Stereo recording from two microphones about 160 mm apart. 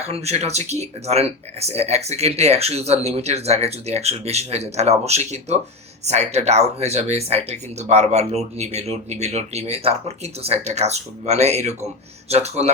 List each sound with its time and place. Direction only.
0.1 s speech: 40° right (ahead or behind)